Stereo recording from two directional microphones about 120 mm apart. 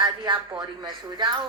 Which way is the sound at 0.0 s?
40° right (ahead or behind).